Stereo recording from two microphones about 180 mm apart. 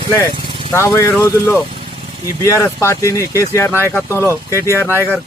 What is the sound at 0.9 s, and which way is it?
Speech, 15° left (ahead or behind).